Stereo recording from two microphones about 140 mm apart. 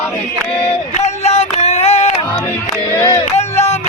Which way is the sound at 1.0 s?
50° left (ahead or behind).